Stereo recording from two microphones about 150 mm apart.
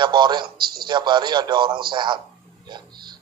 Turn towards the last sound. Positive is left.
turn(degrees=-30)  # may be behind; listen again after turning